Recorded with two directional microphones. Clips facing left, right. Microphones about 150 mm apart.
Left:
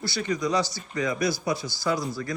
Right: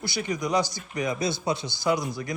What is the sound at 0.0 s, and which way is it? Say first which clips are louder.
Speech: left 2 dB; 15° right (ahead or behind).